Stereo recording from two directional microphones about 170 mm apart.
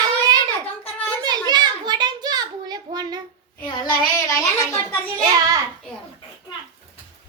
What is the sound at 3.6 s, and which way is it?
Child singing, 20° left (ahead or behind).